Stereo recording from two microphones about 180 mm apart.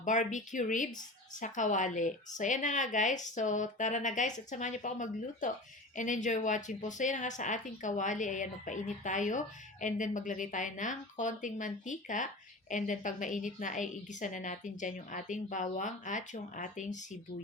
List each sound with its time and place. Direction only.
0.0 s a woman's voice: 45° left (ahead or behind)